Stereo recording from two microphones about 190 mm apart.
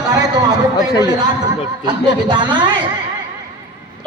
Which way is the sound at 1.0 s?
20° right (ahead or behind).